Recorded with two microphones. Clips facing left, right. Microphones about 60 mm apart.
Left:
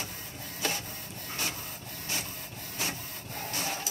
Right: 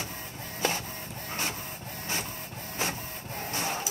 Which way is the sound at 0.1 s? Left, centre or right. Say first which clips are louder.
Right 3 dB; right.